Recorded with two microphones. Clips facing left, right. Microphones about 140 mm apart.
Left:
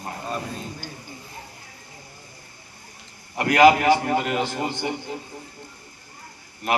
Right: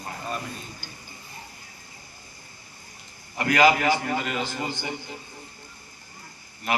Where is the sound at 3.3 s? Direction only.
60° left (ahead or behind).